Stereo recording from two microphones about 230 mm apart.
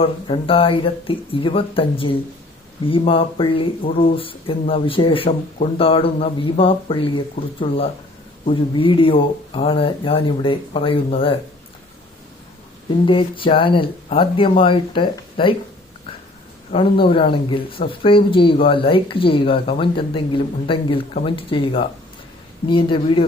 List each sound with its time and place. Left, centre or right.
0.0 s speech: left
13.1 s speech: left
16.7 s speech: left